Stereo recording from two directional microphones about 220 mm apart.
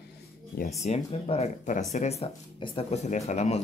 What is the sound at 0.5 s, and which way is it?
Speech, 35° left (ahead or behind).